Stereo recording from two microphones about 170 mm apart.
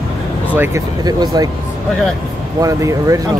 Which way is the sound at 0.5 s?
15° right (ahead or behind).